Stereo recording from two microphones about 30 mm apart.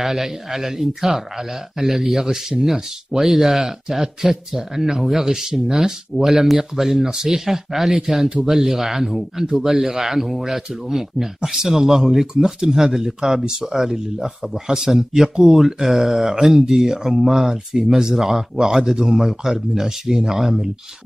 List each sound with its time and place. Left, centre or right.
0.0 s speech: centre
18.1 s speech: centre